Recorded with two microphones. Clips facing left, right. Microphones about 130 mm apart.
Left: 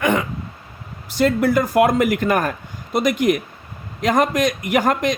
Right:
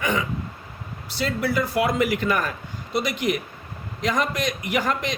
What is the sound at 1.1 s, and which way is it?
Speech, 45° left (ahead or behind).